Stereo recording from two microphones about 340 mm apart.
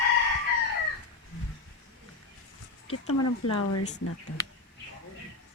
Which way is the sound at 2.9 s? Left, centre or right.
Left.